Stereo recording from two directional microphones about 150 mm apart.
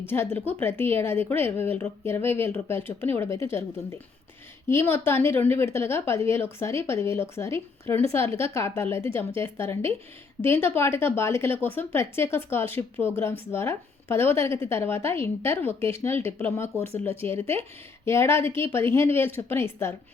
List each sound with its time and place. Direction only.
0.0 s a woman's voice: 15° left (ahead or behind)
4.7 s a woman's voice: 15° left (ahead or behind)